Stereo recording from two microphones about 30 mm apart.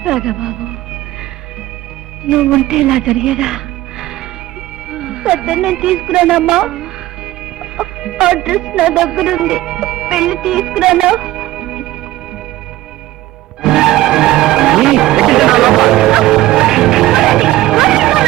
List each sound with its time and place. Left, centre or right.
0.0 s speech: centre
2.6 s a woman's voice: right
7.6 s music: right
13.6 s music: centre